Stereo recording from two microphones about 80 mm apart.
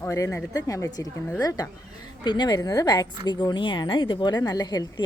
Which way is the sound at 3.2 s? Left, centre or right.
Left.